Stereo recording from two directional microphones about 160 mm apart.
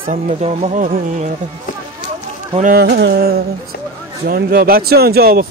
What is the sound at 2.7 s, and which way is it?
Speech, 85° right.